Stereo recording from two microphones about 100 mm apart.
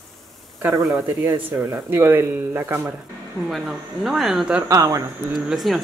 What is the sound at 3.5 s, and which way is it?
Speech, centre (ahead or behind).